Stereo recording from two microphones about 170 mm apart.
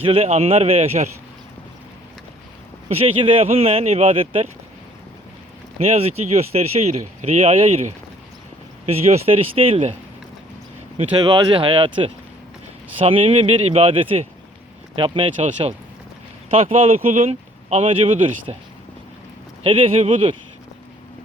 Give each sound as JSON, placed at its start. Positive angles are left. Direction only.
{"t": 0.0, "sound": "speech", "side_deg": -35}
{"t": 2.9, "sound": "speech", "side_deg": -35}
{"t": 5.8, "sound": "speech", "side_deg": -35}
{"t": 11.2, "sound": "speech", "side_deg": -30}
{"t": 15.4, "sound": "speech", "side_deg": -40}
{"t": 19.6, "sound": "speech", "side_deg": -35}